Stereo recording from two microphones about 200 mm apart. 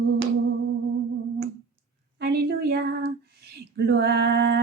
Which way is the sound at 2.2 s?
55° right (ahead or behind).